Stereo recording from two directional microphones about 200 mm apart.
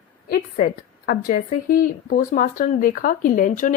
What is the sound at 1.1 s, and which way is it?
Speech, 45° left (ahead or behind).